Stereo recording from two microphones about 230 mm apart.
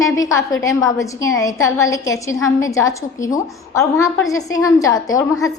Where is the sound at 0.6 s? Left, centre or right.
Centre.